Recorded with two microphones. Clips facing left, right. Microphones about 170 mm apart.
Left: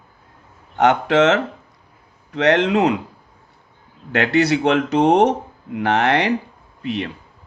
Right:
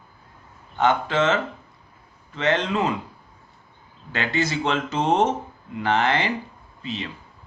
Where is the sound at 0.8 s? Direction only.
75° left (ahead or behind).